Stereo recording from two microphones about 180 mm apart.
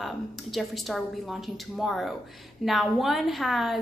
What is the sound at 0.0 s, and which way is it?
A woman's voice, centre (ahead or behind).